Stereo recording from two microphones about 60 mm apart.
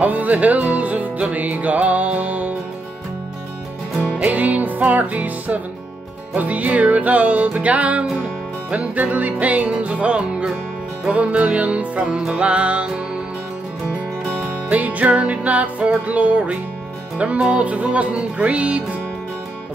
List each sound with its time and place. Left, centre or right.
0.0 s music: right
4.0 s music: right
14.7 s music: right